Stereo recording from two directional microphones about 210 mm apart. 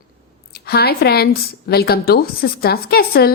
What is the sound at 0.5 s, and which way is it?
A woman's voice, 50° left (ahead or behind).